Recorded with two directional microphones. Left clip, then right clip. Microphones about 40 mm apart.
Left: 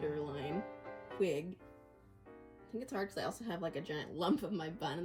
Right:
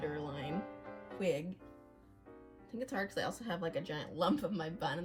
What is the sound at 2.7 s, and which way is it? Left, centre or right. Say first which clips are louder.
Speech: right 1 dB; right.